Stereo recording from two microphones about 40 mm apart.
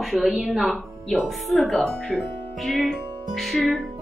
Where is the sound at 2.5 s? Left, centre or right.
Centre.